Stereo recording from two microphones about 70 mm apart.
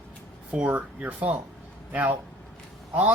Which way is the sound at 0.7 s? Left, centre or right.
Right.